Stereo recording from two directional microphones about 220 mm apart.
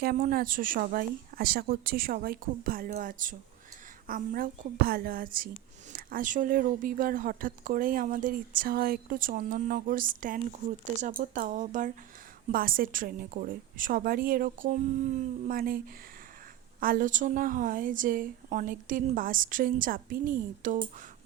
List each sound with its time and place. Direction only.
0.0 s speech: 40° right (ahead or behind)
16.8 s speech: 40° right (ahead or behind)